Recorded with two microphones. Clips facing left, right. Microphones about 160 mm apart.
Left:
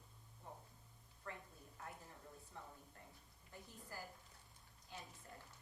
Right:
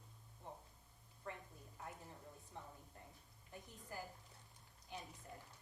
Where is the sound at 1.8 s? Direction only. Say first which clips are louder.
Right 2 dB; 20° right (ahead or behind).